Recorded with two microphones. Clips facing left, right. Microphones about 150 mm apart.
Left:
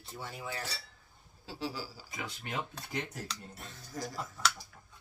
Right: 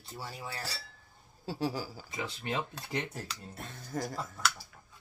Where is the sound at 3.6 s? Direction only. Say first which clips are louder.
Right 6 dB; 55° right (ahead or behind).